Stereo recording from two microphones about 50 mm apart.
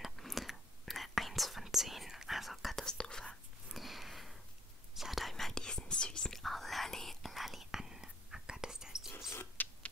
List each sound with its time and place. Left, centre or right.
0.0 s whispering: centre
2.8 s whispering: centre
3.7 s sniff: centre
4.9 s whispering: centre
6.4 s whispering: centre
9.6 s printer: left